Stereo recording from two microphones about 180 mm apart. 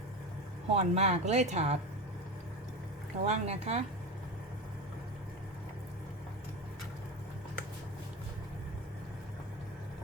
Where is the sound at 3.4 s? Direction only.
35° right (ahead or behind).